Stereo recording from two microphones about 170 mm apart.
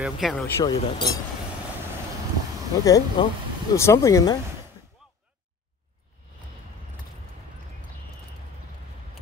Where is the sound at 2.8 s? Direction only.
20° left (ahead or behind).